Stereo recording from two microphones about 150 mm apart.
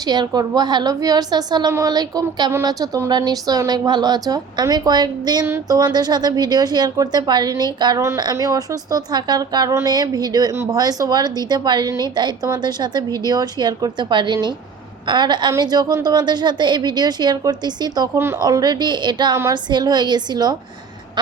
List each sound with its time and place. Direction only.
0.1 s speech: 25° right (ahead or behind)